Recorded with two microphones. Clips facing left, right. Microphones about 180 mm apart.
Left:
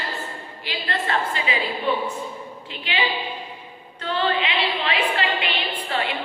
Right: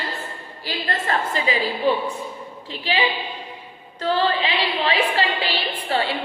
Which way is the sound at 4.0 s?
35° right (ahead or behind).